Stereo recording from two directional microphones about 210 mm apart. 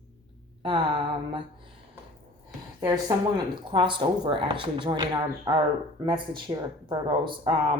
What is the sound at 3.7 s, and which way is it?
Speech, 20° right (ahead or behind).